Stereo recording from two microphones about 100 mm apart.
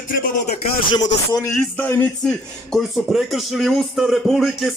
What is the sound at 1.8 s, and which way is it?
Speech, 20° left (ahead or behind).